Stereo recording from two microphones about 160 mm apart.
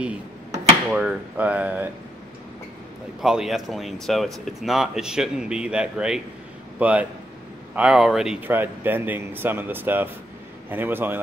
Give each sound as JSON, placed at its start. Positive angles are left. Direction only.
{"t": 0.8, "sound": "speech", "side_deg": -10}
{"t": 3.2, "sound": "speech", "side_deg": 0}